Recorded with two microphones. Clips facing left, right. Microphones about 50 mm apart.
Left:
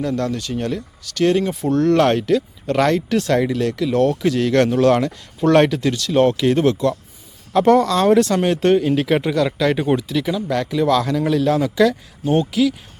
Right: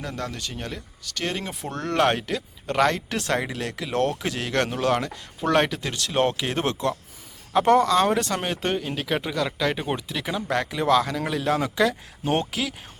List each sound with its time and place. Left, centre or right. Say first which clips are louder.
0.0 s speech: left 10 dB; centre
1.7 s speech: left 7 dB; right
3.1 s speech: left 8 dB; right
3.9 s speech: left 6 dB; right
4.2 s speech: left 9 dB; right; by 5.9 s centre
5.9 s speech: left 7 dB; right
8.3 s speech: left 10 dB; centre
12.3 s speech: left 8 dB; right